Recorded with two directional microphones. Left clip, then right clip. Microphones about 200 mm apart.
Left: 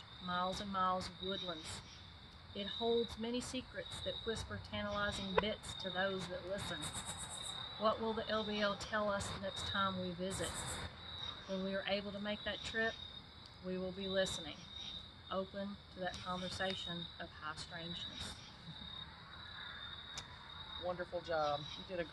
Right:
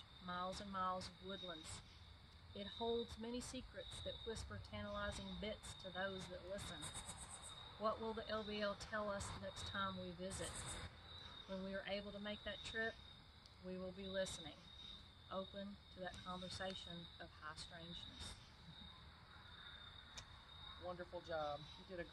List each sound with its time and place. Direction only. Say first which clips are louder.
0.3 s speech: left 8 dB; 15° right (ahead or behind)
3.2 s speech: left 8 dB; 15° right (ahead or behind)
7.8 s speech: left 7 dB; 15° right (ahead or behind)
11.7 s speech: left 8 dB; 20° right (ahead or behind)
20.8 s speech: left 9 dB; 20° left (ahead or behind)